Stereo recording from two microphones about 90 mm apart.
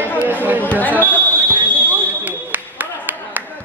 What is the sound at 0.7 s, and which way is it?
Basketball bounce, 20° left (ahead or behind).